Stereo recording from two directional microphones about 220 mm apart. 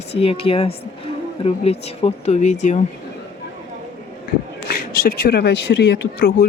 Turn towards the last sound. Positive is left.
turn(degrees=50)  # may be behind; listen again after turning